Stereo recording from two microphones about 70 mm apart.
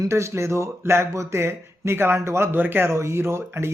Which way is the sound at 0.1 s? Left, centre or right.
Right.